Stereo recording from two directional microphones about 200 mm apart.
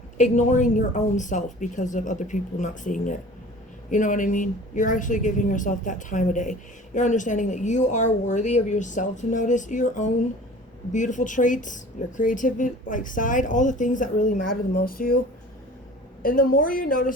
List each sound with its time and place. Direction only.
0.2 s a woman's voice: 35° left (ahead or behind)
16.2 s speech: 45° left (ahead or behind)